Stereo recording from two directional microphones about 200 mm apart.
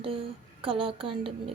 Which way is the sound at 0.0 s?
25° right (ahead or behind).